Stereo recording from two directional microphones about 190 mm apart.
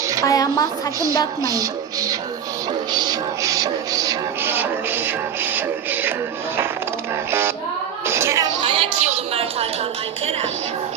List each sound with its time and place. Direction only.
0.3 s a woman's voice: 20° left (ahead or behind)
1.4 s a woman's voice: 20° right (ahead or behind)
2.9 s music: 20° right (ahead or behind)
7.3 s music: 10° right (ahead or behind)
8.0 s a sound: 15° right (ahead or behind); by 9.6 s 30° right (ahead or behind)